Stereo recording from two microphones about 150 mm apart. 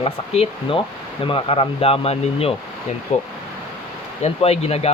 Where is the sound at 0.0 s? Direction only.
35° left (ahead or behind).